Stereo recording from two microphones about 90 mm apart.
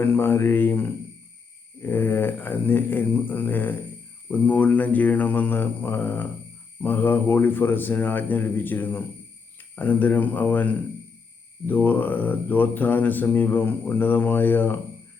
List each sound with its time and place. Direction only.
0.0 s speech: 25° left (ahead or behind)